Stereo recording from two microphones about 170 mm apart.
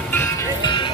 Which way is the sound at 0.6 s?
25° left (ahead or behind).